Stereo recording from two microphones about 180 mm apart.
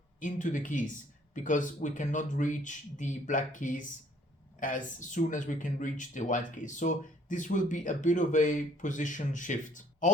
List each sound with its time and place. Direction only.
0.2 s speech: 45° left (ahead or behind)